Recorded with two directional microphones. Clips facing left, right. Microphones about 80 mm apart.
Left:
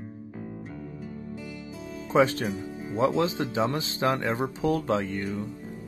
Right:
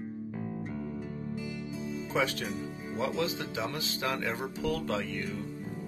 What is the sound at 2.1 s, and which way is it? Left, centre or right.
Speech, left.